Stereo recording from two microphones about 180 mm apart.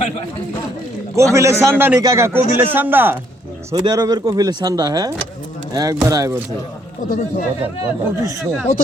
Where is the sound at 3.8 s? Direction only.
20° right (ahead or behind).